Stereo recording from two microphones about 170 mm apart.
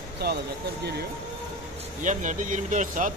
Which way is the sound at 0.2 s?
70° right (ahead or behind).